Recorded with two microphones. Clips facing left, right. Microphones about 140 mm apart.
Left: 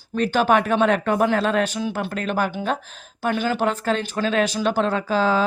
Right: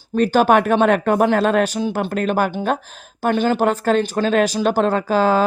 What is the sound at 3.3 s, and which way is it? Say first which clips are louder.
Speech: right 5 dB; 35° right (ahead or behind).